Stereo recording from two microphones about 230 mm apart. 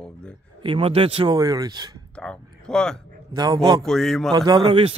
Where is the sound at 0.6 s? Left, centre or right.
Right.